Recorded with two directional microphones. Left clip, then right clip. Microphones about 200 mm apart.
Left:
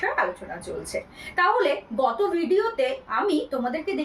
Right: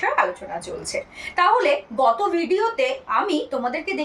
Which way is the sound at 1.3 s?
10° left (ahead or behind).